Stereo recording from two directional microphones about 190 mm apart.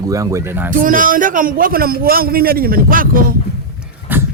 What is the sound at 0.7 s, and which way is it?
A man's voice, 45° right (ahead or behind).